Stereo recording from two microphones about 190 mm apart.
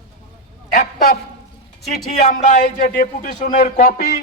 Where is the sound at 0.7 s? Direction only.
45° left (ahead or behind).